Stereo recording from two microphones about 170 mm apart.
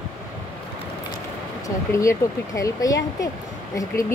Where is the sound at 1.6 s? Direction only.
15° left (ahead or behind).